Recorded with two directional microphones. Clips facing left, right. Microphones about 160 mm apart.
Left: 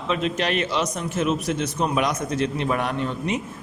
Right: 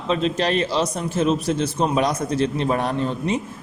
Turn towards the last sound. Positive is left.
turn(degrees=-35)  # may be behind; listen again after turning